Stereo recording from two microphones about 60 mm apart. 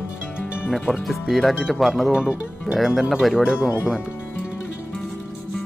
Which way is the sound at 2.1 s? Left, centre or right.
Centre.